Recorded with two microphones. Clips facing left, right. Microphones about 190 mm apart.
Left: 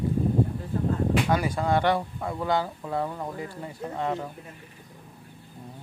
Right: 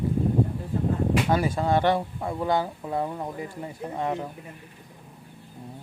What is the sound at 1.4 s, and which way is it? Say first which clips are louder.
Speech: right 1 dB; 25° right (ahead or behind).